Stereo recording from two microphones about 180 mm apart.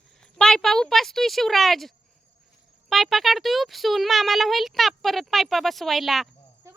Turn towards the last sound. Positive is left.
turn(degrees=0)  # may be behind; listen again after turning